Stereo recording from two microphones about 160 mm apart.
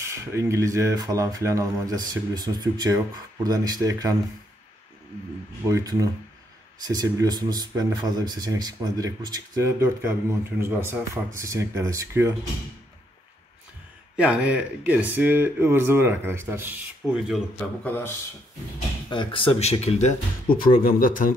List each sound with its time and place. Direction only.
0.1 s speech: 15° right (ahead or behind)
5.7 s speech: 20° right (ahead or behind)
14.1 s speech: 10° right (ahead or behind)
17.3 s speech: 10° left (ahead or behind)
19.0 s speech: 30° left (ahead or behind)
20.4 s speech: 65° left (ahead or behind)